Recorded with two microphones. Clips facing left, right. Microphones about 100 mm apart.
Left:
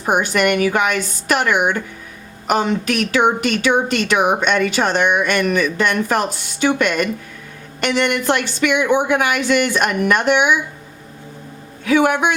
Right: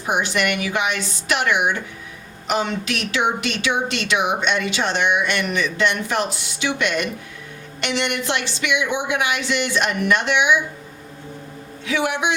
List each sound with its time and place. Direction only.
0.0 s a woman's voice: 45° left (ahead or behind)
11.9 s a woman's voice: 50° left (ahead or behind)